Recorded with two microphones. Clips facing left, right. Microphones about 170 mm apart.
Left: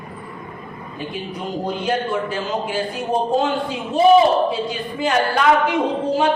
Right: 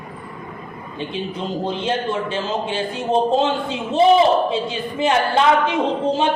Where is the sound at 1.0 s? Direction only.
25° right (ahead or behind).